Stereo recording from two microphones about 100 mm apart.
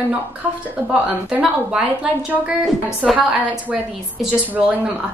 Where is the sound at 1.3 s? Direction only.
10° right (ahead or behind).